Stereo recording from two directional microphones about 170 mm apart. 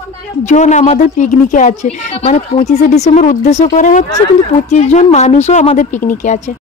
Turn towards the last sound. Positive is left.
turn(degrees=45)  # may be behind; listen again after turning